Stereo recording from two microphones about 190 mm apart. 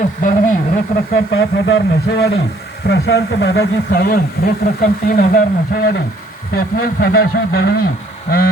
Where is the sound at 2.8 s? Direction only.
60° left (ahead or behind).